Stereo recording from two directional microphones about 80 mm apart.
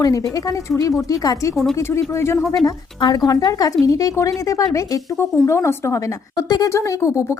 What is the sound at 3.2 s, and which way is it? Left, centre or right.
A woman's voice, left.